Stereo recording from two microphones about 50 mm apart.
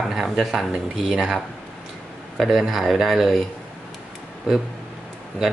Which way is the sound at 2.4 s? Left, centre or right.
Centre.